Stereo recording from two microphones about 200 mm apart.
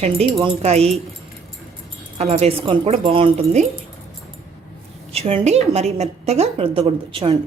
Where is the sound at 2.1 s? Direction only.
30° right (ahead or behind).